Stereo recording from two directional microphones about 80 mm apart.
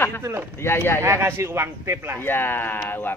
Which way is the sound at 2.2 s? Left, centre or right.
Left.